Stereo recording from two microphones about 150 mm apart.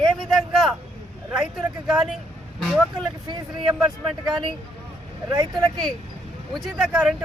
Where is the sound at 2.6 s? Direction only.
5° right (ahead or behind).